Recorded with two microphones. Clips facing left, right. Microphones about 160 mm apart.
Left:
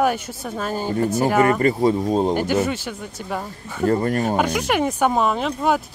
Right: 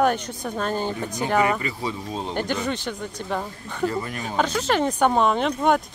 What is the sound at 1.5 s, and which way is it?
Speech, 45° left (ahead or behind).